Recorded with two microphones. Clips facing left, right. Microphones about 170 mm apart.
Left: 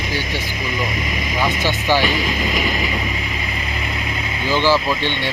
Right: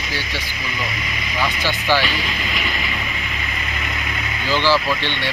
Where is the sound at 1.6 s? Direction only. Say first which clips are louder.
Left 1 dB; 15° left (ahead or behind).